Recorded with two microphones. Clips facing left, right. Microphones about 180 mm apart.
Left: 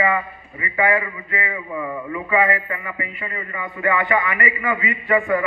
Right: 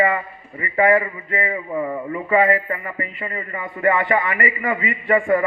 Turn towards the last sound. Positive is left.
turn(degrees=-35)  # may be behind; listen again after turning